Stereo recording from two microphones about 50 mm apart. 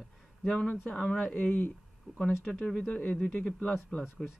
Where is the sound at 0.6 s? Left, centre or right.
Left.